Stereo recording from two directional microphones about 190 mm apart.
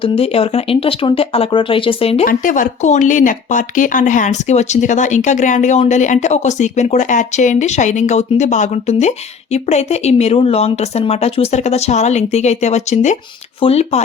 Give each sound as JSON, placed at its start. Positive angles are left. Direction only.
{"t": 0.0, "sound": "speech", "side_deg": 30}
{"t": 2.2, "sound": "speech", "side_deg": 45}